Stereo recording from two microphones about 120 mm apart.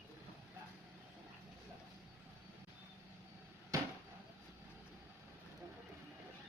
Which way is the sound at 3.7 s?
25° right (ahead or behind).